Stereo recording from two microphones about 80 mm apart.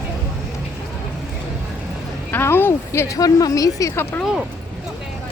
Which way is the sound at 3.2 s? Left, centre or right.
Left.